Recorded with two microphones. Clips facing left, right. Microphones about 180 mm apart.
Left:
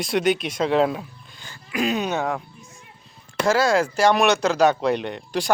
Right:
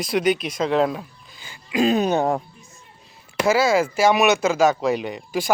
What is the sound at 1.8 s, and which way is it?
Speech, 35° right (ahead or behind).